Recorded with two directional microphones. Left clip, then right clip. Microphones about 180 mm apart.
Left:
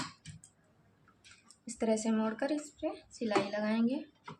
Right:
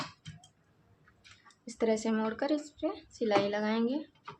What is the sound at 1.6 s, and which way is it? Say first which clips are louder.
Speech: right 2 dB; 35° right (ahead or behind).